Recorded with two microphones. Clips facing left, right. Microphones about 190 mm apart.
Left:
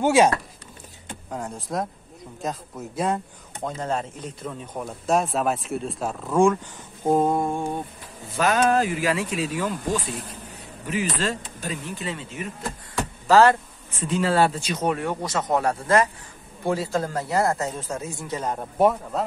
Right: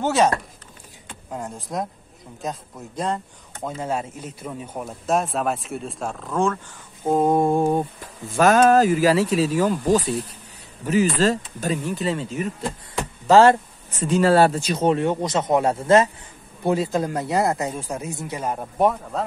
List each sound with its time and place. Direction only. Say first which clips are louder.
0.0 s speech: left 2 dB; 10° left (ahead or behind)
1.3 s speech: even; centre (ahead or behind)
3.6 s speech: right 1 dB; 10° right (ahead or behind); by 6.6 s 10° left (ahead or behind)
7.4 s speech: right 8 dB; 35° right (ahead or behind)
12.9 s hum: right 3 dB; 25° right (ahead or behind)
13.8 s speech: right 6 dB; 40° right (ahead or behind)
14.8 s speech: right 5 dB; 25° right (ahead or behind); by 19.2 s centre (ahead or behind)